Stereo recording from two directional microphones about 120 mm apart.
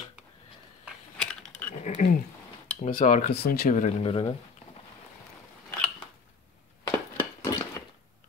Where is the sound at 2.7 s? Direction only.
80° left.